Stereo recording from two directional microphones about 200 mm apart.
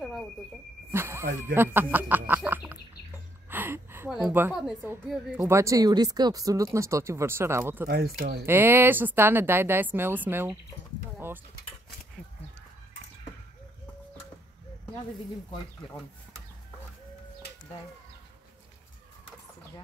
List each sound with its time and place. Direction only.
0.9 s a sound: 15° right (ahead or behind)
1.4 s speech: 10° right (ahead or behind)
3.4 s a sound: 10° right (ahead or behind)
5.4 s speech: 15° right (ahead or behind)
7.9 s speech: 50° right (ahead or behind)
8.5 s speech: 10° right (ahead or behind)